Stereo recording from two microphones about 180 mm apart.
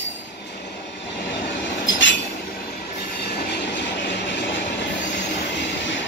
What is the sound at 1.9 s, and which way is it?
Train, 90° left.